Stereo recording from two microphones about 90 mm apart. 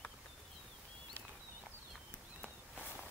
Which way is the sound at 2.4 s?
15° right (ahead or behind).